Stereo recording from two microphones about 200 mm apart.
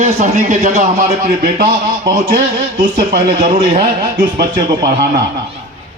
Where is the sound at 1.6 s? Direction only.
50° right (ahead or behind).